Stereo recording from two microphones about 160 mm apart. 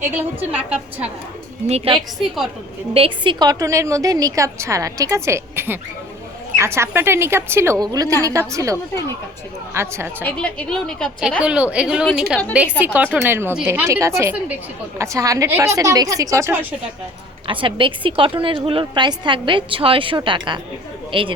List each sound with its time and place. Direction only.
0.0 s a woman's voice: 10° right (ahead or behind)
1.6 s a woman's voice: 40° right (ahead or behind)
2.0 s a woman's voice: centre (ahead or behind)
2.9 s a woman's voice: 35° right (ahead or behind); by 10.2 s 15° right (ahead or behind)
10.2 s a woman's voice: 5° left (ahead or behind)
11.2 s a woman's voice: 5° right (ahead or behind)
17.4 s a woman's voice: 30° right (ahead or behind)